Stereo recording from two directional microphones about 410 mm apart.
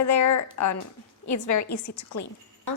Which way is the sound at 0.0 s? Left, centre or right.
Left.